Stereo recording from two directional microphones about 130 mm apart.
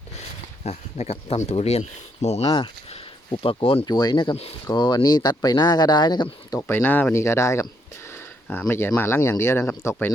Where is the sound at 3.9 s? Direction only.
30° left (ahead or behind).